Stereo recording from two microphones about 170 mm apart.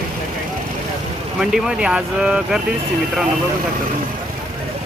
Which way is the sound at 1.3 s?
5° right (ahead or behind).